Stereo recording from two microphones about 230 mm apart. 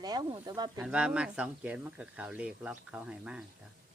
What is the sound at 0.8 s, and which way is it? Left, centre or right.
Speech, centre.